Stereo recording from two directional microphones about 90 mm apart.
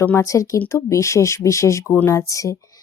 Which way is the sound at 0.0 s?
30° left (ahead or behind).